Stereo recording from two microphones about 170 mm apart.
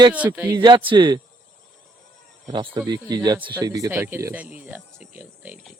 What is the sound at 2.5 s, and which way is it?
Speech, 25° right (ahead or behind).